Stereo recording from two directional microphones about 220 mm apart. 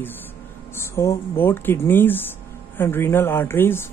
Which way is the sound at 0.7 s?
10° left (ahead or behind).